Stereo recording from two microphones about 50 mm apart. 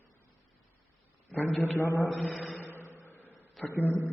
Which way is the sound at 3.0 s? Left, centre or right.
Left.